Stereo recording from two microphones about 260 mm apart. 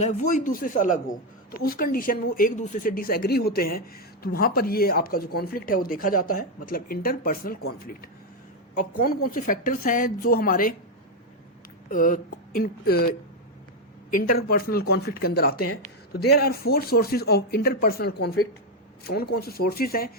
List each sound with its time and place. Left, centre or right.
0.0 s speech: left
8.8 s speech: left
11.9 s speech: left